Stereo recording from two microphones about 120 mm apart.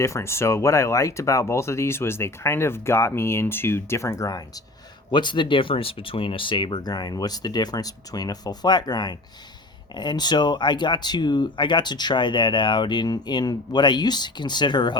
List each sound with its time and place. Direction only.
0.0 s speech: 25° left (ahead or behind); by 14.9 s 40° left (ahead or behind)